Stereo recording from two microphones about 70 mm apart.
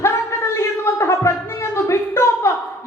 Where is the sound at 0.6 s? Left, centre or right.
Left.